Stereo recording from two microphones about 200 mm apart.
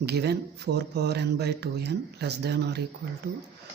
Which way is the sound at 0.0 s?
55° right (ahead or behind).